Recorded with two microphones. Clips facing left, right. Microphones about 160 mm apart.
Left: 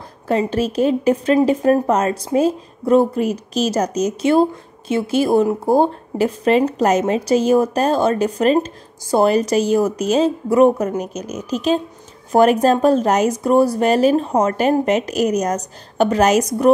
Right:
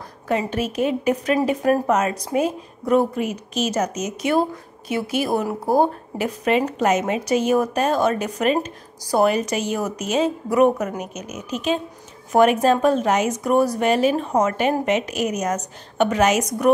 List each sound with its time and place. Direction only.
0.3 s a woman's voice: 30° left (ahead or behind)